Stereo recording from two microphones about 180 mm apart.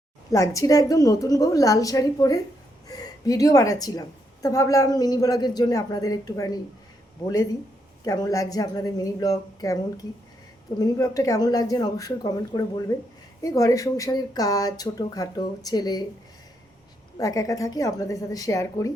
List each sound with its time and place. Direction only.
0.3 s speech: 20° left (ahead or behind)
8.0 s speech: 20° left (ahead or behind)
17.2 s speech: 20° left (ahead or behind)